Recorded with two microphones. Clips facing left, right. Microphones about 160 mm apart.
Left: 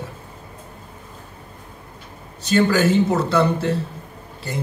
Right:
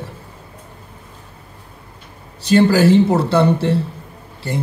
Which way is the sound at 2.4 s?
35° right (ahead or behind).